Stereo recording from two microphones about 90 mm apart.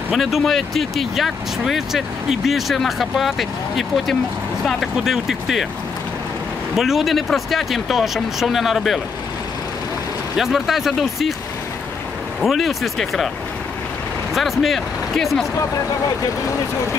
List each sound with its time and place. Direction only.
0.1 s speech: centre (ahead or behind)
6.7 s speech: 5° right (ahead or behind)
10.3 s speech: 5° right (ahead or behind)
12.4 s speech: centre (ahead or behind)
14.3 s speech: centre (ahead or behind)